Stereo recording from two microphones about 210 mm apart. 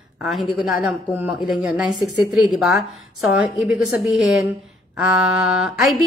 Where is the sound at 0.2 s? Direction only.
Centre (ahead or behind).